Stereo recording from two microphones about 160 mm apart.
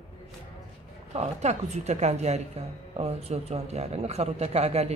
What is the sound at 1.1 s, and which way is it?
A man's voice, 40° right (ahead or behind).